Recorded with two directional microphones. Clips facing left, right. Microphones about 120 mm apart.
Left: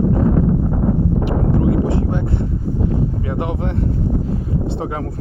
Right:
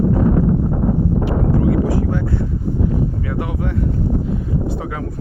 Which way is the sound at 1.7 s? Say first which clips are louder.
Even; 25° left (ahead or behind).